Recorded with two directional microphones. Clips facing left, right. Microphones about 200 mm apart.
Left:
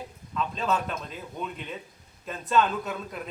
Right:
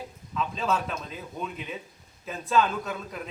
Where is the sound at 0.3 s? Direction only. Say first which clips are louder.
Even; centre (ahead or behind).